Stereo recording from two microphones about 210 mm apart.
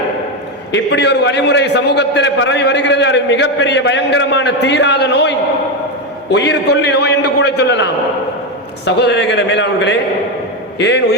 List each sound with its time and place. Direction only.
0.7 s a man's voice: 55° left (ahead or behind)
6.3 s a man's voice: 55° left (ahead or behind)